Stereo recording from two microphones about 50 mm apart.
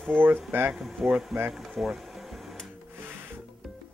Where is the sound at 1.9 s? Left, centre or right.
Centre.